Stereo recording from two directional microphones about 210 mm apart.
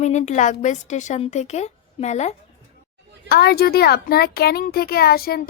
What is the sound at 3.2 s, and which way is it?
A child's voice, 50° left (ahead or behind).